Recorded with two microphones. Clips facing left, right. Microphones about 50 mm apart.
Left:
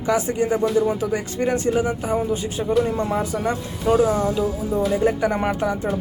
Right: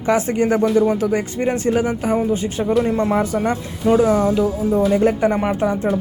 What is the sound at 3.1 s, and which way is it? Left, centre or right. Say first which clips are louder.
Speech: right 4 dB; right.